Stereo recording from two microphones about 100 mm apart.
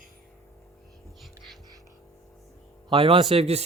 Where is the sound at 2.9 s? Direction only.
70° right (ahead or behind).